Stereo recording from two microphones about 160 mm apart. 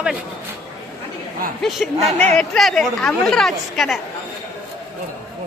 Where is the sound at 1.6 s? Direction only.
Centre (ahead or behind).